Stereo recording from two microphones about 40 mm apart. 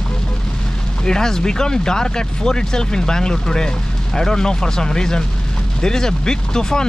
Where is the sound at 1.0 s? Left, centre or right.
Centre.